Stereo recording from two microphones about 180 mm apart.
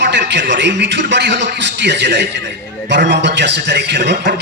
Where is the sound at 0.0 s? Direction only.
75° right (ahead or behind).